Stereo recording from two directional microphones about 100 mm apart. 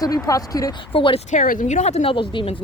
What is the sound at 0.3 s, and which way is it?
Speech, 40° left (ahead or behind).